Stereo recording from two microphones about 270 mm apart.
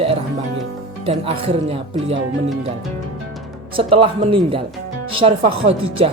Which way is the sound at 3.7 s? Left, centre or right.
Centre.